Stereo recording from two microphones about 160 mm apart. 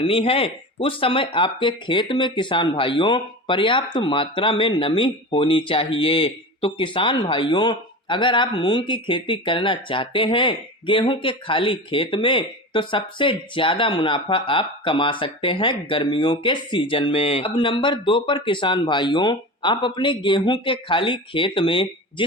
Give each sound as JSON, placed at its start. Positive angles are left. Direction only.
{"t": 0.0, "sound": "speech", "side_deg": 35}